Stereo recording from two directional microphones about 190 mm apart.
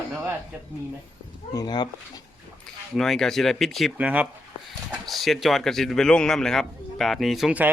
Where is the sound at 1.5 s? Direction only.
20° left (ahead or behind).